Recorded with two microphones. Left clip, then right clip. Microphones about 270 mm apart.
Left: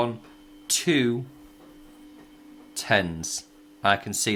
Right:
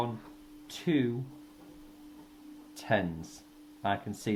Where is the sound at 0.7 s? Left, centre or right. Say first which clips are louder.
Left 8 dB; left.